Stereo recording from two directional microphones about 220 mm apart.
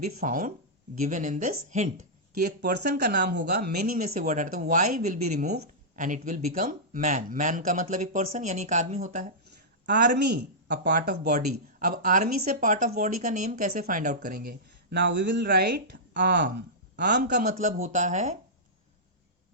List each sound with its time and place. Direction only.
0.2 s speech: 35° right (ahead or behind)
2.6 s speech: 50° right (ahead or behind)
10.1 s speech: 50° right (ahead or behind)
11.3 s speech: 35° right (ahead or behind); by 17.2 s 50° right (ahead or behind)
17.2 s speech: 35° right (ahead or behind)